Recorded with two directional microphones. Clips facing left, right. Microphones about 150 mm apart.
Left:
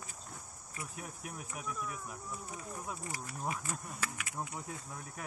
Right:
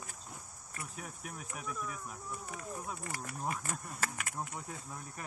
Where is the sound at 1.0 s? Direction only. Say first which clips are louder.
Even; 5° left (ahead or behind).